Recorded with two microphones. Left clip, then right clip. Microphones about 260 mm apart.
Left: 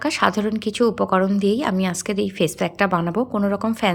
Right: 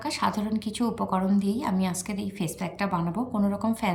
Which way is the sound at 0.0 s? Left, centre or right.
Centre.